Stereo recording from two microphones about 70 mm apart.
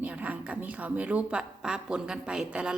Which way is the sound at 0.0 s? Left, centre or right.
Right.